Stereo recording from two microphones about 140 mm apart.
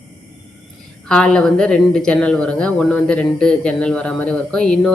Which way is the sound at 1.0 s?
5° left (ahead or behind).